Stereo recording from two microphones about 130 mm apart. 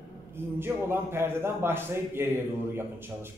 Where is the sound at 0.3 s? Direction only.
15° right (ahead or behind).